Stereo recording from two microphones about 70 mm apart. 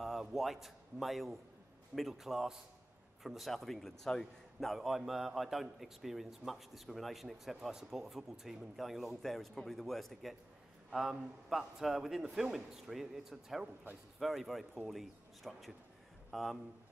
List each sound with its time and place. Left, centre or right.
0.0 s a man's voice: centre